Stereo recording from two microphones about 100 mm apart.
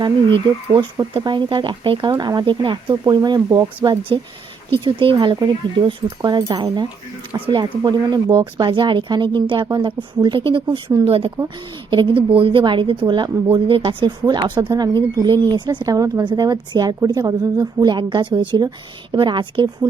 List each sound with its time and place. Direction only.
0.0 s speech: 50° right (ahead or behind)
7.3 s speech: 60° right (ahead or behind)
7.6 s speech: 45° right (ahead or behind)
11.0 s speech: 70° right (ahead or behind)
11.4 s speech: 60° right (ahead or behind)